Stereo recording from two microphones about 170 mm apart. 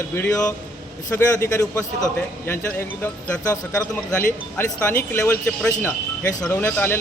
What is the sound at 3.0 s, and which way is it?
Speech, 5° left (ahead or behind).